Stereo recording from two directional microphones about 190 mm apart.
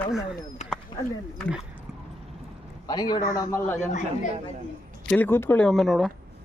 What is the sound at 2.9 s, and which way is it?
A man's voice, 20° left (ahead or behind).